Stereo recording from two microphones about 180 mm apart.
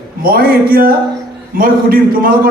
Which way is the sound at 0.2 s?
55° right (ahead or behind).